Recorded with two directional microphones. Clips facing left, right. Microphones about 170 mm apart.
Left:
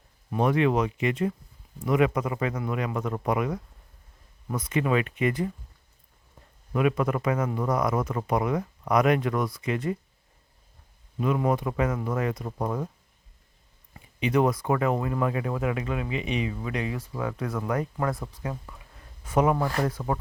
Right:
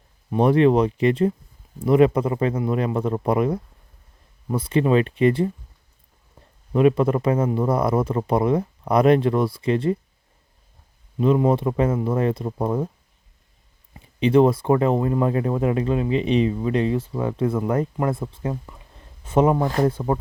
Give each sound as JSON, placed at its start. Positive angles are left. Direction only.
{"t": 0.3, "sound": "speech", "side_deg": -30}
{"t": 6.7, "sound": "speech", "side_deg": -30}
{"t": 11.2, "sound": "speech", "side_deg": -25}
{"t": 13.9, "sound": "speech", "side_deg": -30}